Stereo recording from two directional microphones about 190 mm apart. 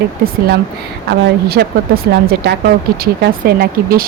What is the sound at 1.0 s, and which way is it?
Speech, 55° right (ahead or behind).